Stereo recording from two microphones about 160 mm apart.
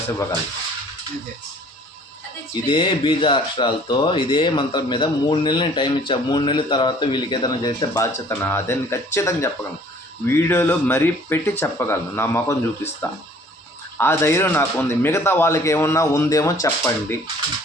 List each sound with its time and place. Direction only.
2.6 s a man's voice: 30° left (ahead or behind); by 12.5 s 15° left (ahead or behind)
14.0 s a man's voice: 15° left (ahead or behind)